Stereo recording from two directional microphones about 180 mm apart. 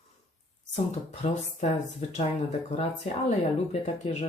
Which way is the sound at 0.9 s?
40° left (ahead or behind).